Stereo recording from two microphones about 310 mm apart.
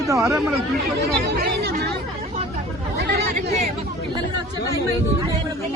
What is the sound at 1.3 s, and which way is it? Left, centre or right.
Chatter, right.